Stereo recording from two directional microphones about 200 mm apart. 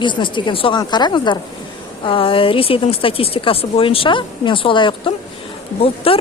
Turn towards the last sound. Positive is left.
turn(degrees=30)  # may be behind; listen again after turning